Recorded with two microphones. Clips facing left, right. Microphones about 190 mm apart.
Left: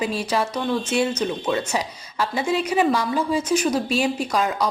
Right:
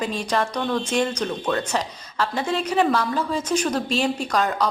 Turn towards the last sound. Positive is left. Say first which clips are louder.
# even
turn(degrees=10)  # may be behind; listen again after turning